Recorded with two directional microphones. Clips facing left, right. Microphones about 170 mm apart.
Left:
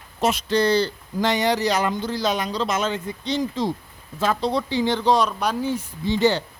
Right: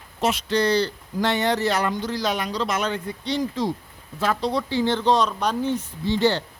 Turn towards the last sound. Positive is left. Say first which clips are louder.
# left 1 dB
turn(degrees=15)  # may be behind; listen again after turning